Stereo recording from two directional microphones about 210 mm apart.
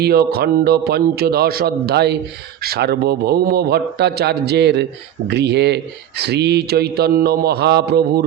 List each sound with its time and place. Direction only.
0.0 s speech: 50° right (ahead or behind)